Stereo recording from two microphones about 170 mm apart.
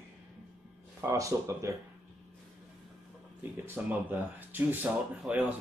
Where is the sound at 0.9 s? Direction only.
20° right (ahead or behind).